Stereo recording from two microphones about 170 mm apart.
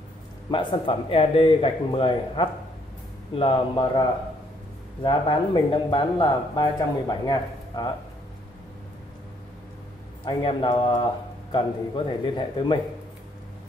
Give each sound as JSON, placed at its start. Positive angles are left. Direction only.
{"t": 0.5, "sound": "speech", "side_deg": 30}
{"t": 5.0, "sound": "speech", "side_deg": 30}
{"t": 10.2, "sound": "speech", "side_deg": 30}